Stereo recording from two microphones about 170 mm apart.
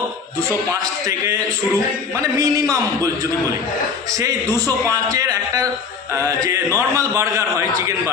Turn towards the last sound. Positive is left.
turn(degrees=-15)  # may be behind; listen again after turning